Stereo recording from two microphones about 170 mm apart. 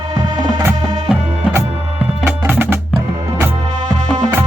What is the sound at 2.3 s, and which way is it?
Music, 10° right (ahead or behind).